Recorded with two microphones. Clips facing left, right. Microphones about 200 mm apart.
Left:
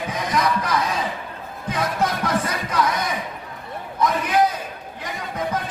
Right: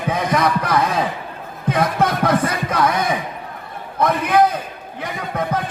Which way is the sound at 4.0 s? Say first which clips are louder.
Right 4 dB; 55° right (ahead or behind).